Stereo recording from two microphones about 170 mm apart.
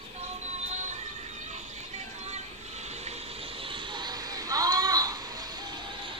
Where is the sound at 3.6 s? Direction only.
30° right (ahead or behind).